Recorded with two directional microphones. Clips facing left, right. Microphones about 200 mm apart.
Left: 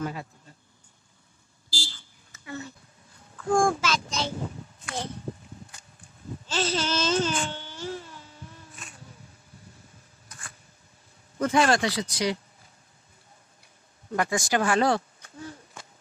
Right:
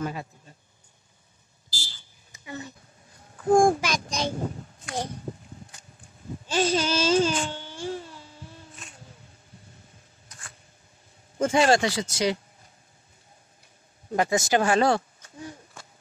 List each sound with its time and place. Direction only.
0.0 s speech: 15° right (ahead or behind)
1.7 s a sound: 15° right (ahead or behind)
3.5 s speech: 15° right (ahead or behind)
6.4 s baby cry: 15° right (ahead or behind)
11.3 s speech: 25° right (ahead or behind)
14.1 s speech: 25° right (ahead or behind)